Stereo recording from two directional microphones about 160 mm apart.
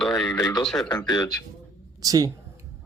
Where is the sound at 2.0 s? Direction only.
25° right (ahead or behind).